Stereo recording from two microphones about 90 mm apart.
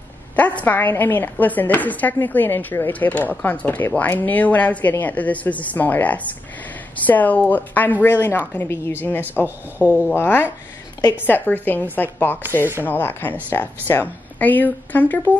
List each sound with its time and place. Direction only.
0.4 s a woman's voice: 15° left (ahead or behind)
9.2 s speech: 20° right (ahead or behind)
10.1 s speech: 25° left (ahead or behind)